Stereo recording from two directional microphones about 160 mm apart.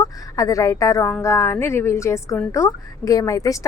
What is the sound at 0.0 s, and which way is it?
A woman's voice, 20° left (ahead or behind).